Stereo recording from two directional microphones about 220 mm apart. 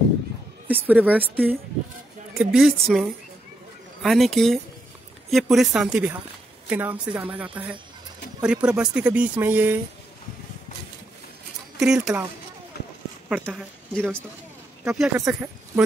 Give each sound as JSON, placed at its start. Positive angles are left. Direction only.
{"t": 0.7, "sound": "speech", "side_deg": -5}
{"t": 11.8, "sound": "speech", "side_deg": 0}
{"t": 12.7, "sound": "run", "side_deg": 50}
{"t": 13.3, "sound": "speech", "side_deg": 0}